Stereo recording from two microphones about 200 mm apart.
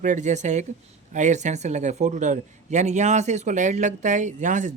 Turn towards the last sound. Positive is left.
turn(degrees=-40)  # may be behind; listen again after turning